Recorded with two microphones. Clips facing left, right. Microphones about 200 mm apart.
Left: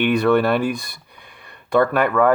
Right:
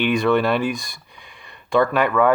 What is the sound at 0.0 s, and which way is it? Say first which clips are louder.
Speech: left 2 dB; 60° left (ahead or behind).